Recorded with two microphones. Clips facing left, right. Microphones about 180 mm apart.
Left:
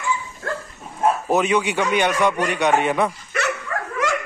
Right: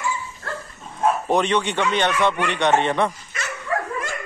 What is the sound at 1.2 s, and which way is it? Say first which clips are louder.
A man's voice: left 1 dB; 5° left (ahead or behind).